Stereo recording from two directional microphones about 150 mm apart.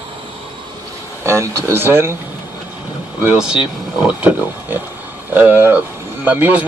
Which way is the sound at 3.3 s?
5° right (ahead or behind).